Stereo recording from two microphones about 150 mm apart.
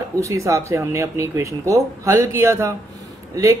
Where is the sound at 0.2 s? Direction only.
20° right (ahead or behind).